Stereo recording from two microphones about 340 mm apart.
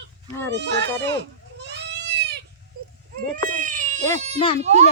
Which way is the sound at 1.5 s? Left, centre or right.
Right.